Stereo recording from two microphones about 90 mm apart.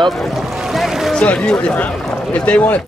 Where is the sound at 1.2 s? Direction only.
10° left (ahead or behind).